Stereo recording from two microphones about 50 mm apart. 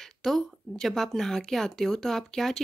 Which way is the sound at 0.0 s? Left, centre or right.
Centre.